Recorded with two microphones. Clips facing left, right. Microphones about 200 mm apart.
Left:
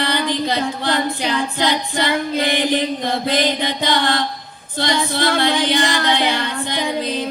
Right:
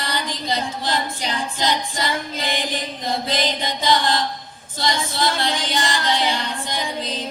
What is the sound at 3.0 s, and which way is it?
Mantra, 60° left (ahead or behind).